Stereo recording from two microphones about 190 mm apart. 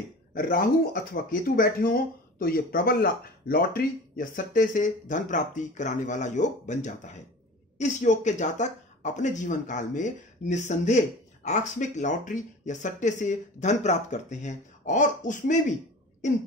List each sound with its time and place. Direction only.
0.3 s speech: 45° left (ahead or behind)